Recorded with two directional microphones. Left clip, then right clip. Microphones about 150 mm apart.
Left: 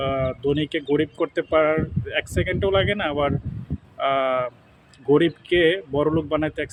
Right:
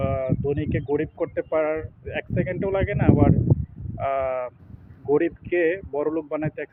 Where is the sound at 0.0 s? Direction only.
30° left (ahead or behind).